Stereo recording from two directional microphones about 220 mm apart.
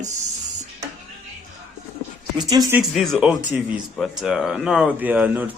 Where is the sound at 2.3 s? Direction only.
15° right (ahead or behind).